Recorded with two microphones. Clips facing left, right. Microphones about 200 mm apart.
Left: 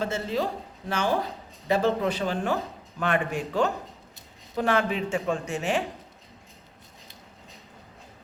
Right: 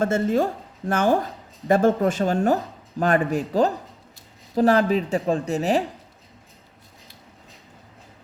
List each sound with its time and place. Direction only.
0.0 s a woman's voice: 50° right (ahead or behind)